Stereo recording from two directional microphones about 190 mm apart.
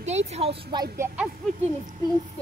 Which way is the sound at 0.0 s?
35° right (ahead or behind).